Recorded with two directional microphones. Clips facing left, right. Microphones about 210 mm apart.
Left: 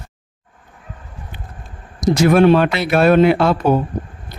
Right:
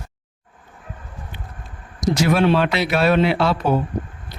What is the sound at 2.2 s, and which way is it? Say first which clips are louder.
A man's voice: left 6 dB; 50° left (ahead or behind).